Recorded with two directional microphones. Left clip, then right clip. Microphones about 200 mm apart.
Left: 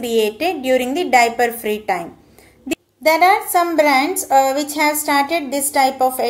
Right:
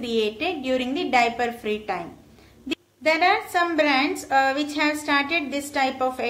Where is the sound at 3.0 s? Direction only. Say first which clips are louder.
Left 7 dB; 25° left (ahead or behind).